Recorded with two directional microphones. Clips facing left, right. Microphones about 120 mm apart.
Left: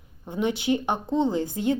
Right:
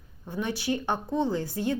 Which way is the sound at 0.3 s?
20° left (ahead or behind).